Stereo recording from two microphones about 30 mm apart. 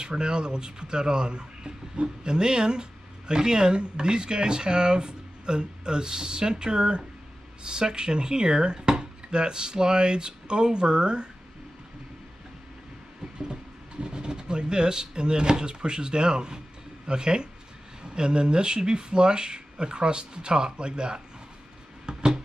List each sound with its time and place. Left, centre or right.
0.0 s speech: right
13.4 s speech: right
22.0 s a sound: right